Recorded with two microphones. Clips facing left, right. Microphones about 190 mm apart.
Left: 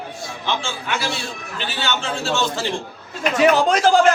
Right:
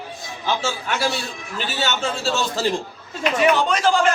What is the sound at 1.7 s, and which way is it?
Speech, 45° right (ahead or behind).